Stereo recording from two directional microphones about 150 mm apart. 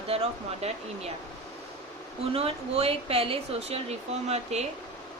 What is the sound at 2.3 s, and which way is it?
Speech, 40° right (ahead or behind).